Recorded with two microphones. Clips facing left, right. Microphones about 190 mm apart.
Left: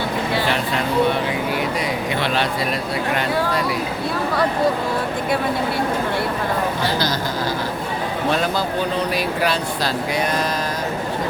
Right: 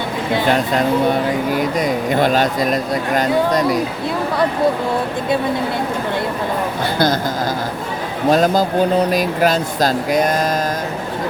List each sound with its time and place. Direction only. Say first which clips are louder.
1.8 s speech: right 6 dB; 45° right (ahead or behind)
8.3 s speech: right 8 dB; 40° right (ahead or behind)